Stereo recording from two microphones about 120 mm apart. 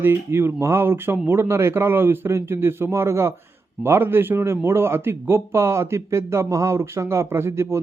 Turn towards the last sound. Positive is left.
turn(degrees=-20)  # may be behind; listen again after turning